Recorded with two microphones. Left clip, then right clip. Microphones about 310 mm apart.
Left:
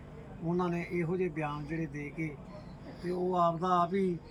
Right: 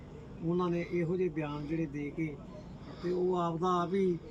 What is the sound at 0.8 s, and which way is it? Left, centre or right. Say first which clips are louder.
Speech: right 1 dB; centre.